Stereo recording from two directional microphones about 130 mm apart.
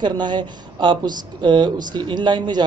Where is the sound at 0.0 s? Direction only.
35° right (ahead or behind).